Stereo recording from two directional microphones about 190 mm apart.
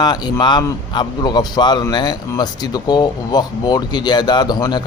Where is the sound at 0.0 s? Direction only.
20° left (ahead or behind).